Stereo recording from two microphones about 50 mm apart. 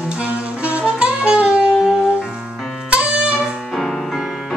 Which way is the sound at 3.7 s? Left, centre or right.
Centre.